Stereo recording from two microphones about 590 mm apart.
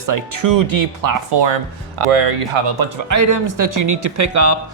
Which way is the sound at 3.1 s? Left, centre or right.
Right.